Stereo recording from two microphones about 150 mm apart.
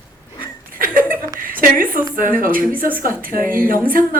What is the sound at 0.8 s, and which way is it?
Chuckle, 70° right (ahead or behind).